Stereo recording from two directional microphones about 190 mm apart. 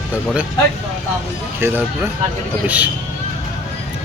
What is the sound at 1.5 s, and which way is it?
Speech, 10° right (ahead or behind).